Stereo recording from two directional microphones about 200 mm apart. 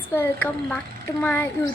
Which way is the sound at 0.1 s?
10° left (ahead or behind).